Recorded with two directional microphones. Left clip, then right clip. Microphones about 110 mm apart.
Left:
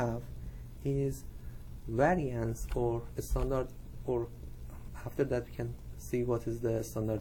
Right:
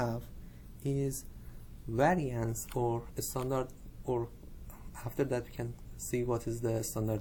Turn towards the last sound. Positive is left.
turn(degrees=-20)  # may be behind; listen again after turning